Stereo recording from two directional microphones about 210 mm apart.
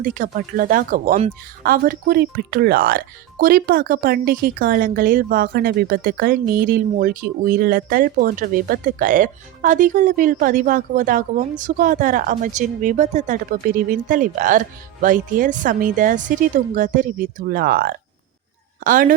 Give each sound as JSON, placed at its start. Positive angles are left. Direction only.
{"t": 0.0, "sound": "speech", "side_deg": -40}